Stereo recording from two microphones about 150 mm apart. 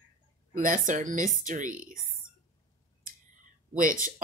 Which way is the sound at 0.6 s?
60° right (ahead or behind).